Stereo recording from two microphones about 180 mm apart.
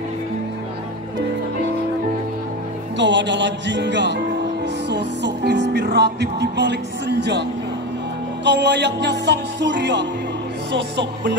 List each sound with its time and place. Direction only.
3.0 s speech: 85° right
4.8 s music: 70° right (ahead or behind)
8.5 s music: 75° right (ahead or behind)